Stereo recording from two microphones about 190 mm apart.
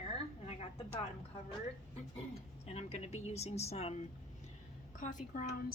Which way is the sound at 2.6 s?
35° left (ahead or behind).